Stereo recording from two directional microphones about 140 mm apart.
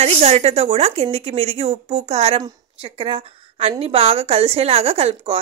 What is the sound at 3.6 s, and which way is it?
Speech, 45° right (ahead or behind).